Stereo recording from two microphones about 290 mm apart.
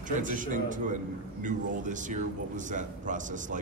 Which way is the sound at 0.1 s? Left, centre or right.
Right.